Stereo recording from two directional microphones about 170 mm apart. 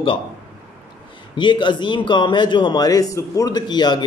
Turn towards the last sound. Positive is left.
turn(degrees=25)  # may be behind; listen again after turning